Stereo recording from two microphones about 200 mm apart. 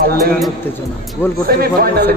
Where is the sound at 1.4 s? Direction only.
50° right (ahead or behind).